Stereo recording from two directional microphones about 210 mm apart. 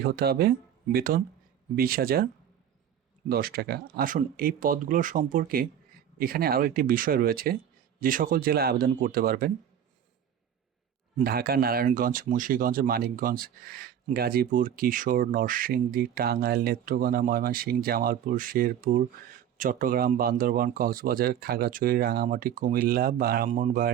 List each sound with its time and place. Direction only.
0.0 s speech: 45° right (ahead or behind)
3.2 s speech: 45° right (ahead or behind)
11.2 s speech: 45° right (ahead or behind)